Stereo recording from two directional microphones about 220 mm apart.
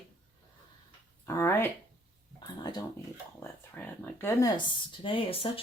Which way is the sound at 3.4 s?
5° left (ahead or behind).